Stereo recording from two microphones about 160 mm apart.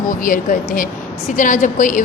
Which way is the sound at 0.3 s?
60° left (ahead or behind).